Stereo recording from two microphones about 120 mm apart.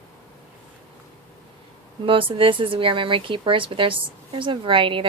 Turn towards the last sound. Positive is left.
turn(degrees=-45)  # may be behind; listen again after turning